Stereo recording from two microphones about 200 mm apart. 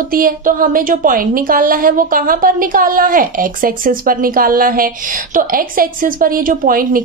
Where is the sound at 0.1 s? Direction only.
45° right (ahead or behind).